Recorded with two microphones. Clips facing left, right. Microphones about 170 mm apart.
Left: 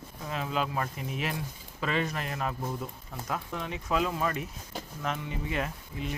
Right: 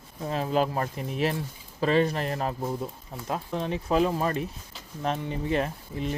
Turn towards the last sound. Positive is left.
turn(degrees=-35)  # may be behind; listen again after turning